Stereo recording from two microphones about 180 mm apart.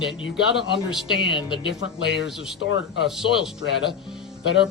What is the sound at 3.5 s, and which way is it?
Speech, 80° left.